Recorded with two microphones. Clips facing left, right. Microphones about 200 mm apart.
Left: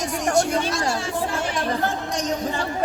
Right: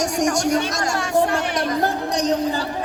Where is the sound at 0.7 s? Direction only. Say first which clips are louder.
Even; 45° right (ahead or behind).